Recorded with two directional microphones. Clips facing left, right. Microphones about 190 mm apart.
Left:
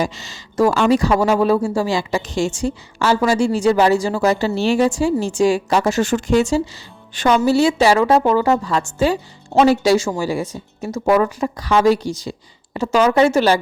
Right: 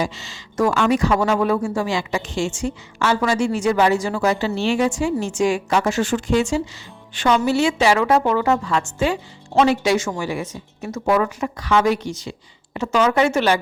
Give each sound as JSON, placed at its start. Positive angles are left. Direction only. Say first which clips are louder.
{"t": 0.0, "sound": "a woman's voice", "louder": "left 2 dB", "side_deg": 40}